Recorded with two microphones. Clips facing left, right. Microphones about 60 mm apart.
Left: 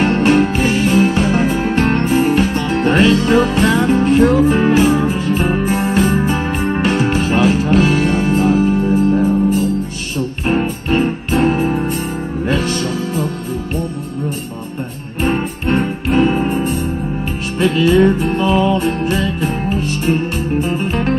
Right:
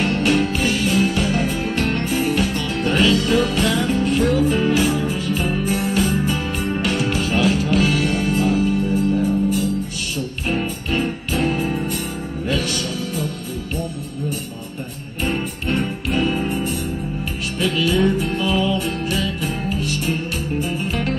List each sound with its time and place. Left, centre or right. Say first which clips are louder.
0.0 s music: left 6 dB; left
15.2 s music: left 6 dB; left